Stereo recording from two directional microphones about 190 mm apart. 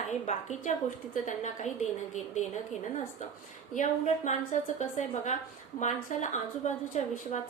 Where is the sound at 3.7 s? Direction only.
40° left (ahead or behind).